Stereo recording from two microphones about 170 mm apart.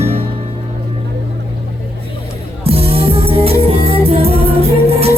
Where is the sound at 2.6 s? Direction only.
35° right (ahead or behind).